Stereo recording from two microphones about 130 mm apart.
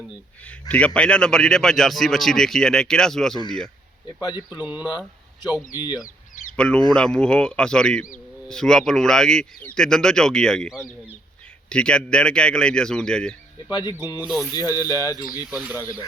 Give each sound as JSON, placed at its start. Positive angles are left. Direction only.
{"t": 0.7, "sound": "a man's voice", "side_deg": 10}
{"t": 4.2, "sound": "speech", "side_deg": 30}
{"t": 4.4, "sound": "speech", "side_deg": -15}
{"t": 6.6, "sound": "a man's voice", "side_deg": 5}
{"t": 11.7, "sound": "speech", "side_deg": 5}
{"t": 14.2, "sound": "speech", "side_deg": -10}
{"t": 14.5, "sound": "speech", "side_deg": 30}
{"t": 15.4, "sound": "speech", "side_deg": -10}